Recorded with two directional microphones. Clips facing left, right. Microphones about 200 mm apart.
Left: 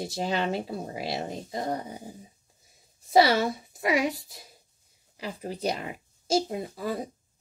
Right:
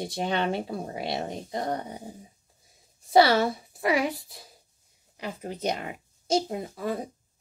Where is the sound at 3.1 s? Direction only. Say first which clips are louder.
Right 1 dB; 25° left (ahead or behind).